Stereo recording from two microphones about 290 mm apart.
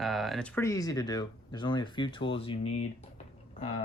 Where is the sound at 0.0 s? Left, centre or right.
Centre.